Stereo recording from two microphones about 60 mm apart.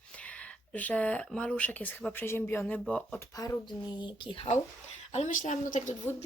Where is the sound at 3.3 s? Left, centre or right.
Left.